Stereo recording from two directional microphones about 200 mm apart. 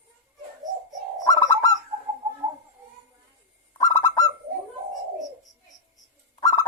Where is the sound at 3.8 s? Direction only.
15° left (ahead or behind).